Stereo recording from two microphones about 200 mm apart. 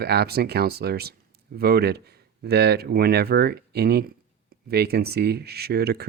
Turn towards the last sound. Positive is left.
turn(degrees=-50)  # may be behind; listen again after turning